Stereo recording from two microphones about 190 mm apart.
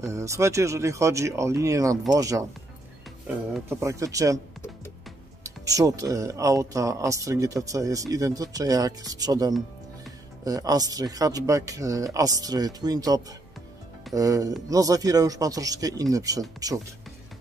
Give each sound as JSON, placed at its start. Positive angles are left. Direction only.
{"t": 0.0, "sound": "speech", "side_deg": -15}
{"t": 3.6, "sound": "speech", "side_deg": -15}
{"t": 5.4, "sound": "speech", "side_deg": -20}